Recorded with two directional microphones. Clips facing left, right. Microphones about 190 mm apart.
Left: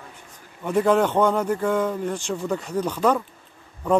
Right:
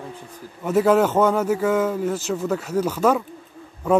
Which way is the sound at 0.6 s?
5° right (ahead or behind).